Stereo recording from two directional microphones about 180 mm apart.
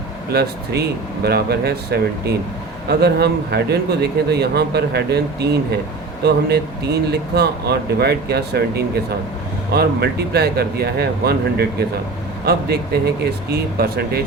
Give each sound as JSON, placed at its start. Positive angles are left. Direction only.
{"t": 0.3, "sound": "speech", "side_deg": -60}